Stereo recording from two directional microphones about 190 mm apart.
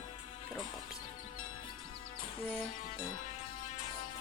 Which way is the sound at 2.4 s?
5° left (ahead or behind).